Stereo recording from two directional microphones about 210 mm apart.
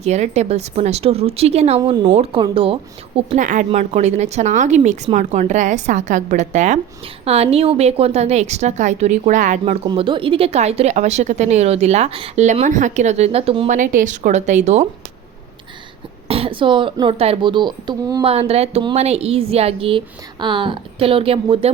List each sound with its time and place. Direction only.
0.0 s a woman's voice: 30° right (ahead or behind)
9.8 s a woman's voice: 20° right (ahead or behind)
13.7 s a woman's voice: 40° right (ahead or behind)
16.3 s speech: 25° right (ahead or behind)